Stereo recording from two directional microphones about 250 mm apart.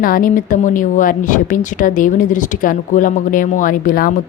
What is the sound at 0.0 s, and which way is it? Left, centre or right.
Speech, left.